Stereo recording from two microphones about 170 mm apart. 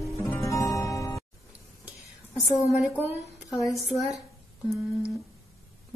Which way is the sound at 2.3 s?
Centre (ahead or behind).